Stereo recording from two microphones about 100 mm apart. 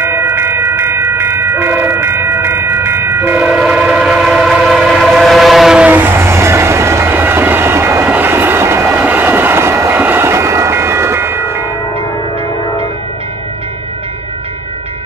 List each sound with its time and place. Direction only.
0.0 s train: 25° right (ahead or behind)
3.4 s train: 10° right (ahead or behind)
5.9 s train: 20° right (ahead or behind)